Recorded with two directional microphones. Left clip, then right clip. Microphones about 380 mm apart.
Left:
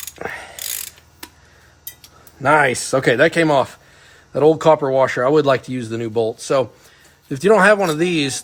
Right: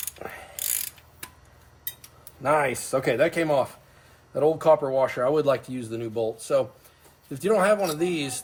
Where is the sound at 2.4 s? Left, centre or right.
Left.